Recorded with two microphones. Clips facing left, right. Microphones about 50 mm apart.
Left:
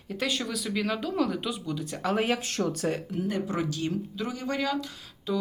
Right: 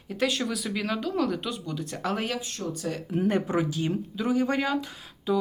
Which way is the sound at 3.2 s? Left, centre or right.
Right.